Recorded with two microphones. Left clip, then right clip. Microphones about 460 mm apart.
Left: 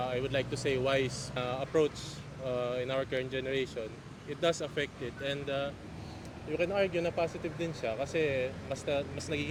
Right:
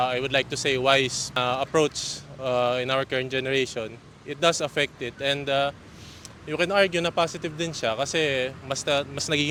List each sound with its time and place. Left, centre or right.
0.0 s speech: right